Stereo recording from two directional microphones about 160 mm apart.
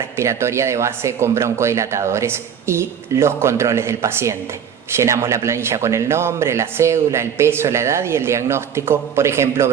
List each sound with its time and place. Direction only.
0.2 s a man's voice: 15° right (ahead or behind)